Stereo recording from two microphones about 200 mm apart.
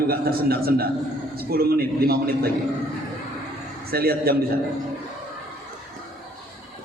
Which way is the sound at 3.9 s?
50° right (ahead or behind).